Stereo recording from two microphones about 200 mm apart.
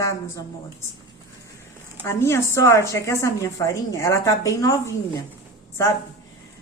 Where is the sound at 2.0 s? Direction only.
15° left (ahead or behind).